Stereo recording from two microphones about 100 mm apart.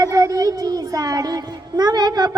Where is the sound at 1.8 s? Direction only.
45° right (ahead or behind).